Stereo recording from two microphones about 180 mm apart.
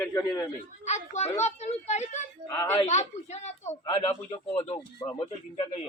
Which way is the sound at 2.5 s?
20° left (ahead or behind).